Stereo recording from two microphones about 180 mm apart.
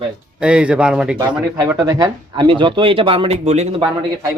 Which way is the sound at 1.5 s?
15° right (ahead or behind).